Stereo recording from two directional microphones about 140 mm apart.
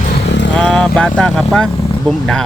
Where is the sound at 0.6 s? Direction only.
5° left (ahead or behind).